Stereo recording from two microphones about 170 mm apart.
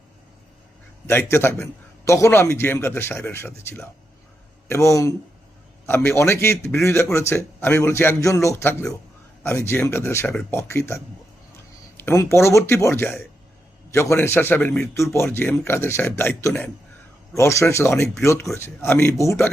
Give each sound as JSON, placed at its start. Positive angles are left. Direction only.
{"t": 1.0, "sound": "a man's voice", "side_deg": 15}